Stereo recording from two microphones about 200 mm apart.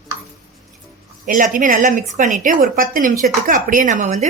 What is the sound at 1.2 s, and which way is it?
A woman's voice, 45° right (ahead or behind).